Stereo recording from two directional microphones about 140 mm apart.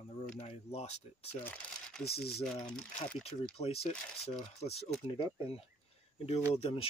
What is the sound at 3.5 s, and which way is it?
Speech, 45° left (ahead or behind).